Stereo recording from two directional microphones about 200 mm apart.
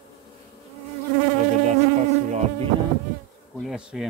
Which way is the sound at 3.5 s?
Centre (ahead or behind).